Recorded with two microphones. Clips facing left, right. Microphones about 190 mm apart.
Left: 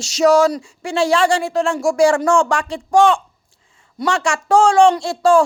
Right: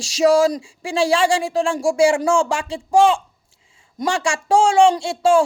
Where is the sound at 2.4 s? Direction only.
25° right (ahead or behind).